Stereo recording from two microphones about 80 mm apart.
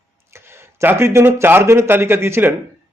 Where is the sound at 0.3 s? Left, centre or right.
Right.